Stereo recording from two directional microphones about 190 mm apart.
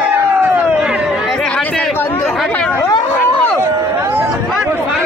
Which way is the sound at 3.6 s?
15° right (ahead or behind).